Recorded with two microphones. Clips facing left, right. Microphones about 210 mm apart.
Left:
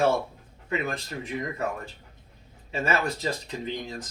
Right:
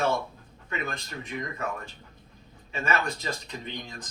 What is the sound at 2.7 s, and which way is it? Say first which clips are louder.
Speech: left 2 dB; 35° left (ahead or behind).